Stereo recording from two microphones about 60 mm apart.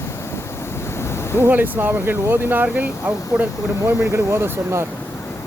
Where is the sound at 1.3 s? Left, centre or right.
Right.